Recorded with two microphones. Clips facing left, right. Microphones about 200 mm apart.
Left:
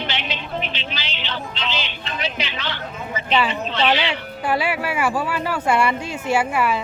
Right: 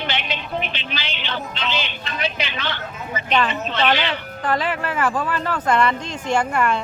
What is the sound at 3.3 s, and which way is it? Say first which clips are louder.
Speech: even; 10° left (ahead or behind).